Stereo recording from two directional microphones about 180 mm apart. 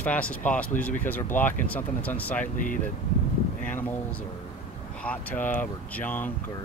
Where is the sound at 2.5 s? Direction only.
45° left (ahead or behind).